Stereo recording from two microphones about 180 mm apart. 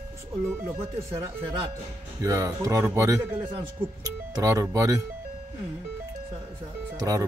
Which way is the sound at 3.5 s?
30° right (ahead or behind).